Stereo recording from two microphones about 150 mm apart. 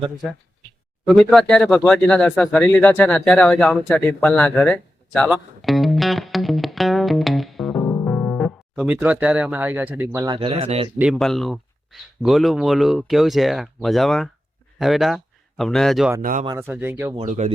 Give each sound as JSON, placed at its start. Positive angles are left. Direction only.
{"t": 1.0, "sound": "speech", "side_deg": 0}
{"t": 8.7, "sound": "speech", "side_deg": -10}
{"t": 10.2, "sound": "speech", "side_deg": -35}
{"t": 10.9, "sound": "speech", "side_deg": -10}
{"t": 16.6, "sound": "speech", "side_deg": -15}
{"t": 17.2, "sound": "speech", "side_deg": -50}